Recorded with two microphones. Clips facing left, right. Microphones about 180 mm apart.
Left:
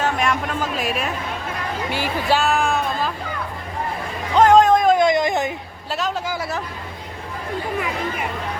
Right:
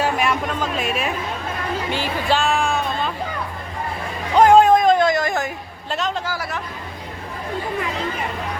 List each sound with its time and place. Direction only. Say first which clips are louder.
0.0 s a sound: right 1 dB; 5° right (ahead or behind)
0.5 s a woman's voice: even; 5° left (ahead or behind)
4.4 s a sound: right 1 dB; 10° right (ahead or behind)
4.9 s speech: left 1 dB; 20° left (ahead or behind)
5.9 s a woman's voice: even; 5° left (ahead or behind)
6.2 s speech: left 1 dB; 20° left (ahead or behind)